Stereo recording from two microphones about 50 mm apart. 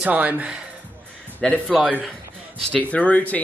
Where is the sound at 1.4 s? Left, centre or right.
Centre.